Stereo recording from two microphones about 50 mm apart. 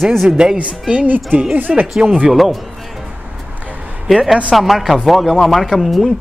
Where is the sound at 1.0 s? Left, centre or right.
Right.